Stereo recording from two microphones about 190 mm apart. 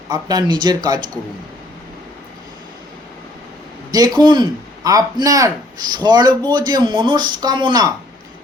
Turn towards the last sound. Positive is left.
turn(degrees=-20)  # may be behind; listen again after turning